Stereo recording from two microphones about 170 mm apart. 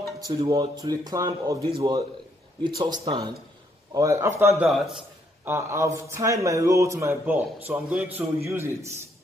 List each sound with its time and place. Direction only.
0.3 s speech: 25° right (ahead or behind)
1.7 s a man's voice: 30° right (ahead or behind); by 4.6 s 15° right (ahead or behind)
4.6 s a sound: centre (ahead or behind)
5.5 s a man's voice: 15° right (ahead or behind)